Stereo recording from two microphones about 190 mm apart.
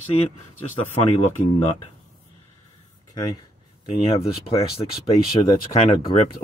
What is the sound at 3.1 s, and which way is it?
Speech, 20° left (ahead or behind).